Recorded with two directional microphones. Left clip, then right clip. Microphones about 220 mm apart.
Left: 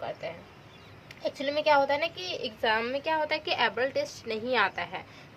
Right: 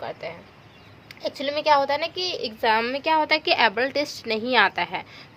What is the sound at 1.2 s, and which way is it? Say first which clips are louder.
A woman's voice: right 3 dB; 40° right (ahead or behind).